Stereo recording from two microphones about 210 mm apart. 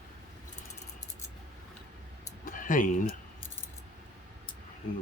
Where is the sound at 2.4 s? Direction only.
40° left (ahead or behind).